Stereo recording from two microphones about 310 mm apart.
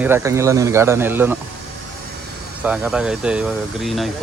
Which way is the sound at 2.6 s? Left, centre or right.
Centre.